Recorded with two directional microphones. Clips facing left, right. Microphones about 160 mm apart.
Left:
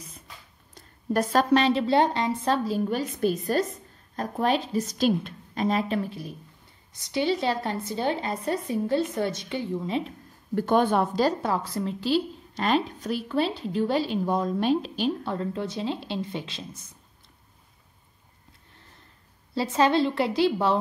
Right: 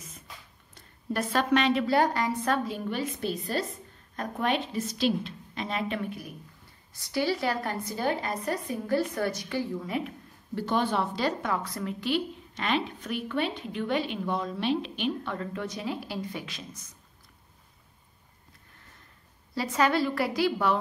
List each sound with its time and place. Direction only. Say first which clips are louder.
0.7 s a woman's voice: left 6 dB; 40° left (ahead or behind)
10.5 s a woman's voice: left 6 dB; 50° left (ahead or behind); by 16.8 s 30° left (ahead or behind)
19.5 s a woman's voice: left 4 dB; 30° left (ahead or behind)